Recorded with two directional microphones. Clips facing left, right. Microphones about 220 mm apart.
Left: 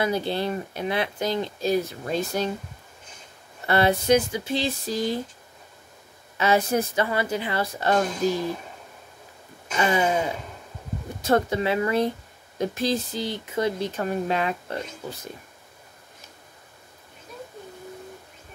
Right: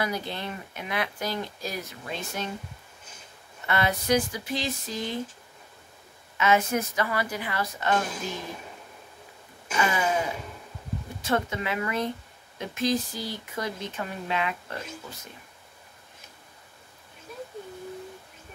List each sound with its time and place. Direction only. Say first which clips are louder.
0.0 s speech: left 6 dB; 30° left (ahead or behind)
2.0 s speech: left 8 dB; 40° left (ahead or behind)
3.6 s speech: left 6 dB; 30° left (ahead or behind)
6.3 s speech: left 2 dB; 35° left (ahead or behind)
9.8 s speech: left 4 dB; 30° left (ahead or behind)
13.9 s speech: left 6 dB; 45° left (ahead or behind)